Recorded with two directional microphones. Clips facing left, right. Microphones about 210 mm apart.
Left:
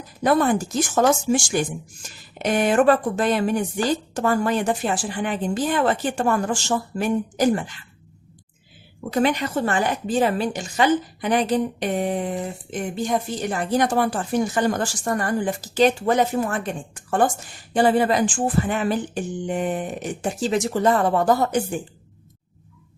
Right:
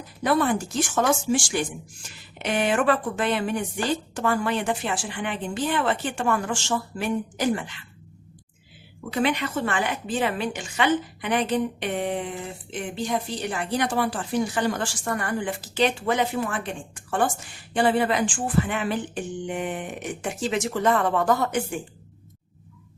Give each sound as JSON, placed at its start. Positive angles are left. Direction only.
{"t": 0.2, "sound": "a woman's voice", "side_deg": 40}
{"t": 9.0, "sound": "a woman's voice", "side_deg": 40}